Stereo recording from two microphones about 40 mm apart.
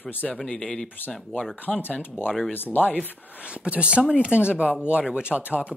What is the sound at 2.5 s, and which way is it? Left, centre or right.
Speech, left.